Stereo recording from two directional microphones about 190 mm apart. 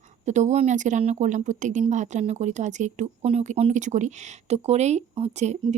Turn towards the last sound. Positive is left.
turn(degrees=-35)  # may be behind; listen again after turning